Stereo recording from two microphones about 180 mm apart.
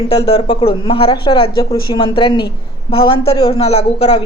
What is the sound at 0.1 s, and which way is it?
Speech, 30° left (ahead or behind).